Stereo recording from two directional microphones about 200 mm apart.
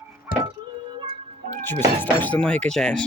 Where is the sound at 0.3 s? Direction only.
45° left (ahead or behind).